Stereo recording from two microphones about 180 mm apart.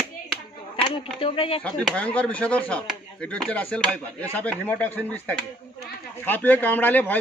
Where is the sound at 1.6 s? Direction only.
5° left (ahead or behind).